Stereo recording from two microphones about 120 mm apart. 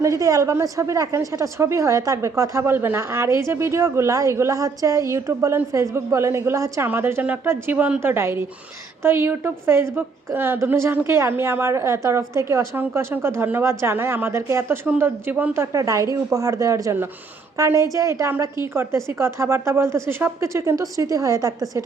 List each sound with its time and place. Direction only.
0.0 s a woman's voice: 25° right (ahead or behind)